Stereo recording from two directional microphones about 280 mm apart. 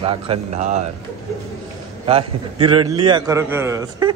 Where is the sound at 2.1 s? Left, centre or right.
Centre.